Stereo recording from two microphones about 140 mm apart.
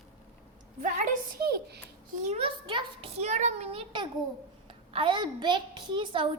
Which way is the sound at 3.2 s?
55° right (ahead or behind).